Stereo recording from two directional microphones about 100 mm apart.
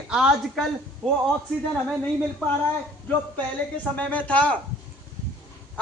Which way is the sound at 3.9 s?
15° left (ahead or behind).